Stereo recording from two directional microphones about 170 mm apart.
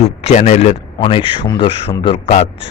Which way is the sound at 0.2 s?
40° left (ahead or behind).